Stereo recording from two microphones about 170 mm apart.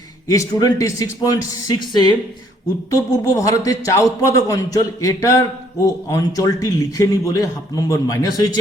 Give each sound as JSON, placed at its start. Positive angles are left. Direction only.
{"t": 0.3, "sound": "a man's voice", "side_deg": 20}